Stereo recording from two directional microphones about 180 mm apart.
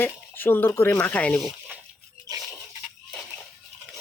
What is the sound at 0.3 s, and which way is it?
Speech, 10° left (ahead or behind).